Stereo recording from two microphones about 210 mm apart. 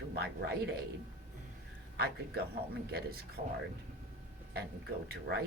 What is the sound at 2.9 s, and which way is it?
Speech, 45° right (ahead or behind).